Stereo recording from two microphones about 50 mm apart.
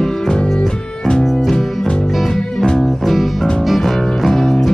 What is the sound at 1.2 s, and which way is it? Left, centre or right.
Music, centre.